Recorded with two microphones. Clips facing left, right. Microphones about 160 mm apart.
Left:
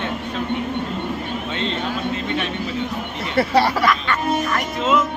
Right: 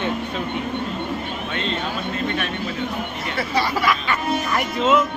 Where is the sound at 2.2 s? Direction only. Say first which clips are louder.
Left 1 dB; 20° left (ahead or behind).